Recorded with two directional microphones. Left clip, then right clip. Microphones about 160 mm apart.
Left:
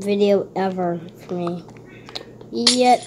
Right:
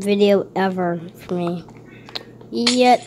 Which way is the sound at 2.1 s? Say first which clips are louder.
Right 2 dB; 20° right (ahead or behind).